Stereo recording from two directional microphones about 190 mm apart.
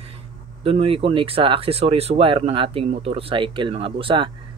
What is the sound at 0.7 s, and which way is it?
Speech, 30° right (ahead or behind).